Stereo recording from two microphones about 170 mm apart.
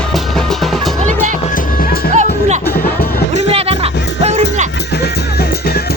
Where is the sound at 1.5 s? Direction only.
55° left (ahead or behind).